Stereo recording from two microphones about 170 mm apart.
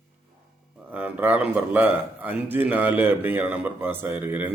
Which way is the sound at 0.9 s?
10° right (ahead or behind).